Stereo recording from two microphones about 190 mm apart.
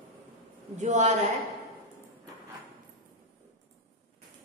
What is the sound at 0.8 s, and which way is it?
Speech, 40° right (ahead or behind).